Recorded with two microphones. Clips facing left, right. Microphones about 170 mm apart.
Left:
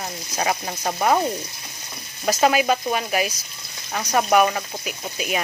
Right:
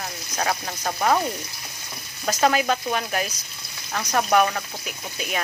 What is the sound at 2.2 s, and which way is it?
Speech, 10° left (ahead or behind).